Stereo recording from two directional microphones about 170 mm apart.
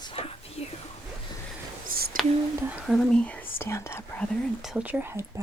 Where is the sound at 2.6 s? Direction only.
10° right (ahead or behind).